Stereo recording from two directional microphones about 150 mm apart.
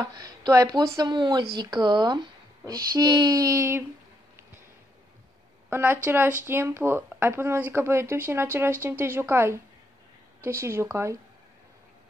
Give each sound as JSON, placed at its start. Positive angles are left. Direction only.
{"t": 0.0, "sound": "speech", "side_deg": -25}
{"t": 5.7, "sound": "speech", "side_deg": -15}